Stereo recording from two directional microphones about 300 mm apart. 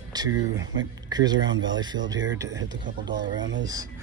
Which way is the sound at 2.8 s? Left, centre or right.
Right.